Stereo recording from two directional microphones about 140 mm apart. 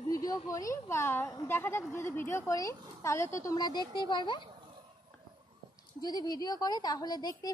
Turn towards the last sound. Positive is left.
turn(degrees=30)  # may be behind; listen again after turning